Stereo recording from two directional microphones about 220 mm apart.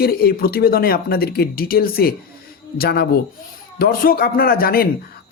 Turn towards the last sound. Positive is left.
turn(degrees=45)  # may be behind; listen again after turning